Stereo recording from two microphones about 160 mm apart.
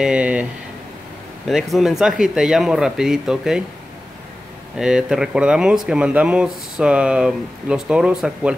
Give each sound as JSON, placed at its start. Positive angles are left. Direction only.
{"t": 0.0, "sound": "speech", "side_deg": -5}
{"t": 1.5, "sound": "speech", "side_deg": 0}
{"t": 4.7, "sound": "speech", "side_deg": -5}